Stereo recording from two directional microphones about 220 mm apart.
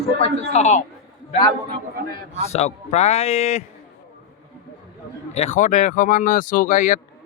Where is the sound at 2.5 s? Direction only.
30° left (ahead or behind).